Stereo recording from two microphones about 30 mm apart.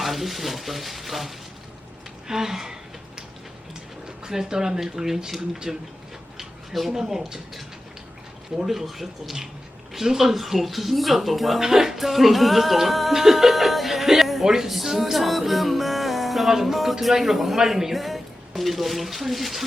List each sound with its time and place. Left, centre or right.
0.0 s speech: centre
2.2 s a man's voice: centre
4.0 s a man's voice: right
6.7 s speech: centre
7.1 s a man's voice: centre
8.6 s a man's voice: centre
11.6 s a man's voice: centre
11.9 s speech: centre
16.5 s a man's voice: centre
17.9 s speech: centre